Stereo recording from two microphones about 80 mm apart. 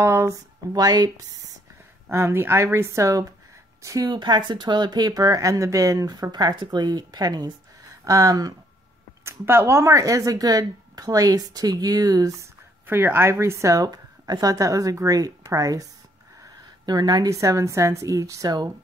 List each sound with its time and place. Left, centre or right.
0.0 s speech: right
0.7 s speech: right
2.0 s speech: right
4.1 s speech: right
8.0 s speech: right
9.2 s speech: right
12.8 s speech: right
13.8 s speech: right
16.8 s speech: right